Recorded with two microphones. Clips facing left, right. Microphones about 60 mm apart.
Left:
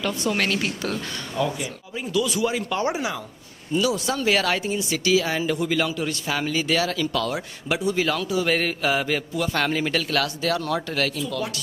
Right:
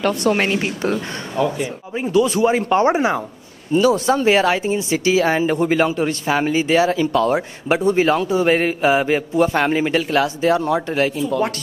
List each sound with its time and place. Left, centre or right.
0.0 s a woman's voice: right
0.4 s speech: right